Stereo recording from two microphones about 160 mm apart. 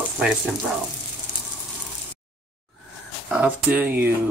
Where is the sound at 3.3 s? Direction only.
10° right (ahead or behind).